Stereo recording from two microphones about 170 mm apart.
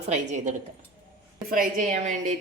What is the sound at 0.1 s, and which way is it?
A woman's voice, 45° right (ahead or behind).